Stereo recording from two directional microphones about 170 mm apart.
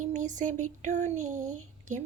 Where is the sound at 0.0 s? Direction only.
45° right (ahead or behind).